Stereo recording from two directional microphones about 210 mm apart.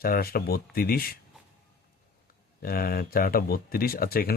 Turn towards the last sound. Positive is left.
turn(degrees=45)  # may be behind; listen again after turning